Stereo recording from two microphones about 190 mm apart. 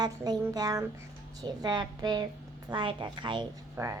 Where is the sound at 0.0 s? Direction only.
20° right (ahead or behind).